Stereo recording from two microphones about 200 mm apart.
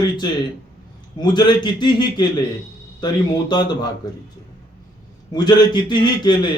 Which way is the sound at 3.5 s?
20° left (ahead or behind).